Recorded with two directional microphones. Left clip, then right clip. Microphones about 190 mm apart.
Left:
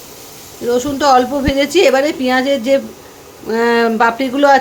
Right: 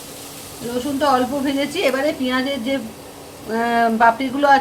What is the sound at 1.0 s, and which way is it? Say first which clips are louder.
Speech: left 5 dB; 65° left (ahead or behind).